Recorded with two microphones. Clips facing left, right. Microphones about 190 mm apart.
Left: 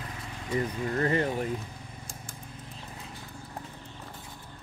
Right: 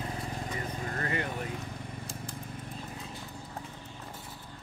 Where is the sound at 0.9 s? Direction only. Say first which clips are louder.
Left 8 dB; 35° left (ahead or behind).